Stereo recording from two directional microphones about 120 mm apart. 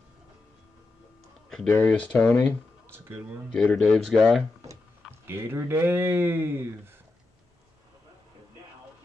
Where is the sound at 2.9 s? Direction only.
20° right (ahead or behind).